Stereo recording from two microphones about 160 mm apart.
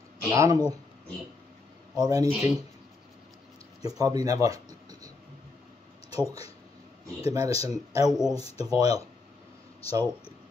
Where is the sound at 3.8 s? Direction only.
25° right (ahead or behind).